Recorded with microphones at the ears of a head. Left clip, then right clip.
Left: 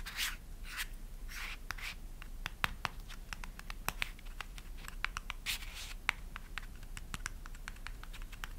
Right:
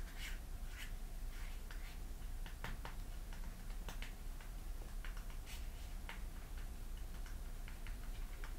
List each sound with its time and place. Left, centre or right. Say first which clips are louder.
0.0 s rub: left 13 dB; left
1.3 s writing: left 15 dB; left
2.4 s scratch: left 14 dB; left